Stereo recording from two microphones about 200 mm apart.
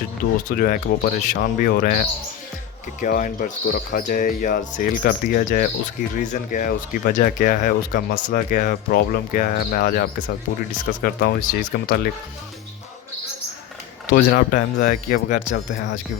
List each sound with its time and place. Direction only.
0.4 s speech: 45° left (ahead or behind)
14.1 s speech: 45° left (ahead or behind)